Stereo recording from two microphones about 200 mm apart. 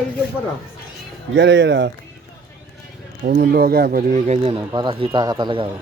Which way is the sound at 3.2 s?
50° right (ahead or behind).